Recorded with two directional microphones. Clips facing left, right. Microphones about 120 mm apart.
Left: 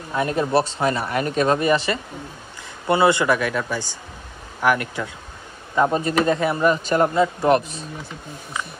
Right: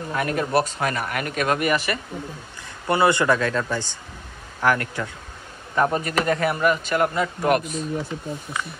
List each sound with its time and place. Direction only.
0.1 s speech: 25° left (ahead or behind)